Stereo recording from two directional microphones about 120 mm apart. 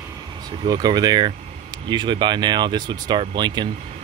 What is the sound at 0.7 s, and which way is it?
Speech, 35° right (ahead or behind).